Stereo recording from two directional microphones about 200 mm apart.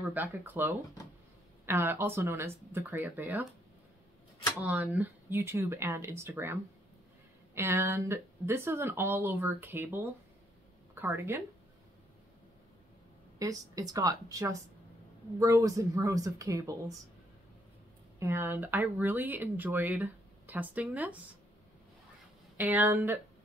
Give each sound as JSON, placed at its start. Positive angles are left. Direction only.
{"t": 0.1, "sound": "speech", "side_deg": -10}
{"t": 4.6, "sound": "speech", "side_deg": -10}
{"t": 13.4, "sound": "speech", "side_deg": -15}
{"t": 18.2, "sound": "speech", "side_deg": -10}
{"t": 22.6, "sound": "speech", "side_deg": -10}